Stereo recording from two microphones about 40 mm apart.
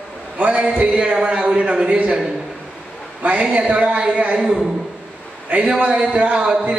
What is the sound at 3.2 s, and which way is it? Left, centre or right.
Speech, right.